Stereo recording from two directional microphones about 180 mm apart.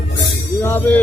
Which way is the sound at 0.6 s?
10° left (ahead or behind).